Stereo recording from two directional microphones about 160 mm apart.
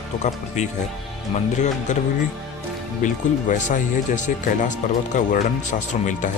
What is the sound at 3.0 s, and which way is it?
Speech, 50° left (ahead or behind).